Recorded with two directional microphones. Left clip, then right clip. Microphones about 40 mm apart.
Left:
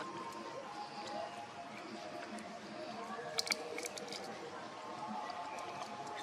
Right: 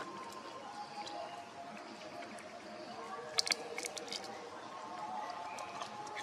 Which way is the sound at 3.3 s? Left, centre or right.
Right.